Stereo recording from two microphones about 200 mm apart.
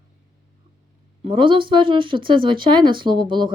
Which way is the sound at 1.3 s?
25° right (ahead or behind).